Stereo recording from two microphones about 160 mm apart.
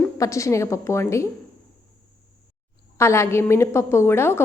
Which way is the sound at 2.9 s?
15° left (ahead or behind).